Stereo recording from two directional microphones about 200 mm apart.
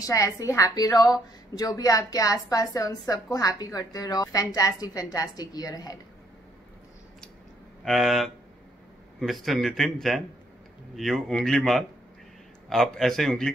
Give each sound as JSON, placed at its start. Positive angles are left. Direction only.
{"t": 0.0, "sound": "a woman's voice", "side_deg": 15}
{"t": 7.8, "sound": "speech", "side_deg": 0}